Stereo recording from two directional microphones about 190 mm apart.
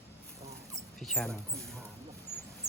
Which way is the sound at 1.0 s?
Centre (ahead or behind).